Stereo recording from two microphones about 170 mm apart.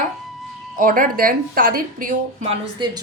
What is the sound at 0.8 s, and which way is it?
Speech, 55° right (ahead or behind).